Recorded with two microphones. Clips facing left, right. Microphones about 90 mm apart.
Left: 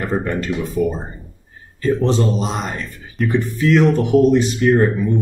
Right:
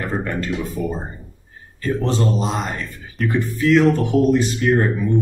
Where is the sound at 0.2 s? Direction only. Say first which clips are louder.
Left 2 dB; 20° left (ahead or behind).